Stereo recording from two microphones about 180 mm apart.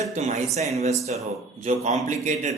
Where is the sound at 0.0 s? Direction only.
40° right (ahead or behind).